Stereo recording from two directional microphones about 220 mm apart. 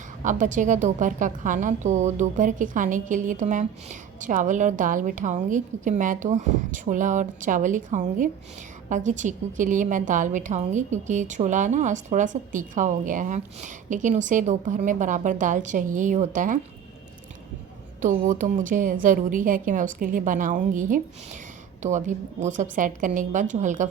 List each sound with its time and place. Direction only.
0.2 s a woman's voice: 35° right (ahead or behind)
18.0 s a woman's voice: 35° right (ahead or behind)